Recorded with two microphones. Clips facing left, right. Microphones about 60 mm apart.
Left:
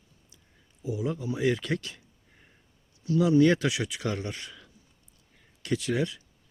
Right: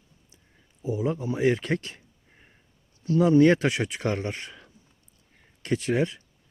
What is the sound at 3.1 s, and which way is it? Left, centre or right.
Speech, right.